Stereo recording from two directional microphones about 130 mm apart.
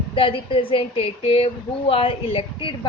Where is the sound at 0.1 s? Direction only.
40° left (ahead or behind).